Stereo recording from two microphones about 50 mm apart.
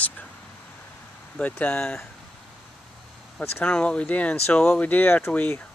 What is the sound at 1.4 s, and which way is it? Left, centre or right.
Speech, left.